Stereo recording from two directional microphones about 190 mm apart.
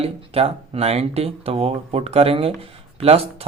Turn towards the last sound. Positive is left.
turn(degrees=-30)  # may be behind; listen again after turning